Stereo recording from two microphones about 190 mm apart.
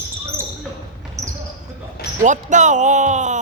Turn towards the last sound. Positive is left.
turn(degrees=-40)  # may be behind; listen again after turning